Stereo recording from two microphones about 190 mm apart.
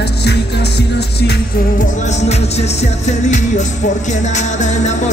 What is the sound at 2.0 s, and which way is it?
Music, 35° left (ahead or behind).